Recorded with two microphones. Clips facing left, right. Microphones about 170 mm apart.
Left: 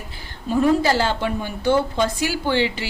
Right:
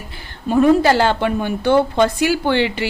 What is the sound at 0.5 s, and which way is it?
A woman's voice, 60° right (ahead or behind).